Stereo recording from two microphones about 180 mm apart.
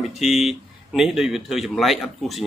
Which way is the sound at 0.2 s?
Centre (ahead or behind).